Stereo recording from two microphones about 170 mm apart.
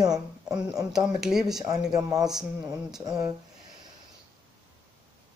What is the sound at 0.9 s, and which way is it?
Speech, 5° right (ahead or behind).